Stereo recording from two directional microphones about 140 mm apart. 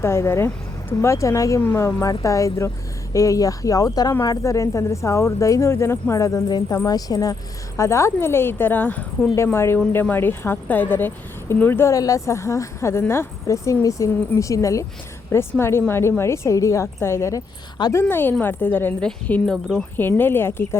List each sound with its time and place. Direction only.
0.0 s a woman's voice: 20° left (ahead or behind)
18.0 s speech: 15° left (ahead or behind)
20.0 s speech: 15° left (ahead or behind)